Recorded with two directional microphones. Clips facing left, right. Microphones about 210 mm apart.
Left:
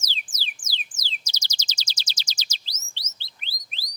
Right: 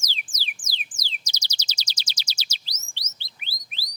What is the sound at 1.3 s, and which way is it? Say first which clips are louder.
Chirp: even; 10° right (ahead or behind).